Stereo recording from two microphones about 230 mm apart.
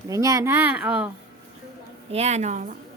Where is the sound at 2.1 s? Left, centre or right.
Right.